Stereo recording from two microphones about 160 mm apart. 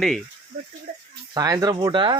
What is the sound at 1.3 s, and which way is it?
Speech, 25° right (ahead or behind).